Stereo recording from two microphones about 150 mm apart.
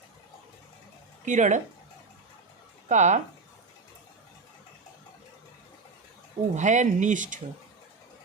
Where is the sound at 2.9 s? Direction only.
50° right (ahead or behind).